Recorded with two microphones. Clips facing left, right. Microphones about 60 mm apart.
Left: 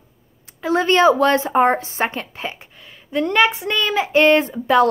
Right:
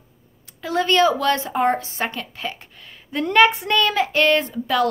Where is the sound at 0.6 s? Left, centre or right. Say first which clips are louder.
Left 2 dB; left.